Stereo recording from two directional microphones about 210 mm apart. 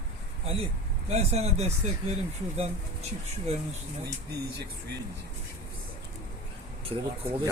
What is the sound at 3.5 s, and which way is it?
Speech, 30° right (ahead or behind).